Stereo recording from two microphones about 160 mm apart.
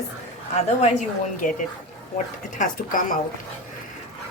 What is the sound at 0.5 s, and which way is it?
Speech, 45° left (ahead or behind).